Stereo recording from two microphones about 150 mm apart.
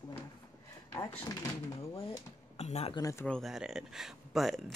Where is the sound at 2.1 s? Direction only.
45° left (ahead or behind).